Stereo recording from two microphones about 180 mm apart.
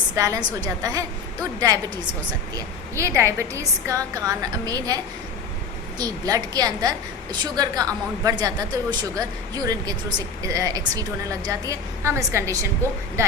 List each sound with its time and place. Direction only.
0.2 s a woman's voice: 20° right (ahead or behind)
6.0 s a woman's voice: 20° right (ahead or behind)